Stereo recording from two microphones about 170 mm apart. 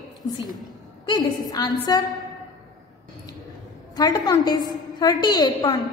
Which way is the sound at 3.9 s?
25° left (ahead or behind).